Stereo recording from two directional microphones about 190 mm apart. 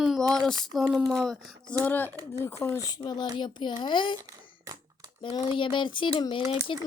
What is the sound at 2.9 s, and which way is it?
Speech, 20° left (ahead or behind).